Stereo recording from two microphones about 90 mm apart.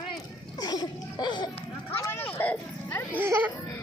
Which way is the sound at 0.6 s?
50° left (ahead or behind).